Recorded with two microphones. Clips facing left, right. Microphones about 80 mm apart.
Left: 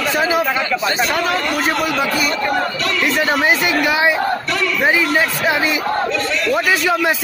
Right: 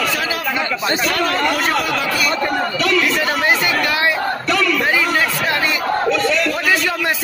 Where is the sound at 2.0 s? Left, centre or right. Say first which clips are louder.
Left 1 dB; left.